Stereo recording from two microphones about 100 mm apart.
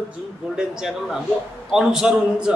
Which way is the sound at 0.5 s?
5° right (ahead or behind).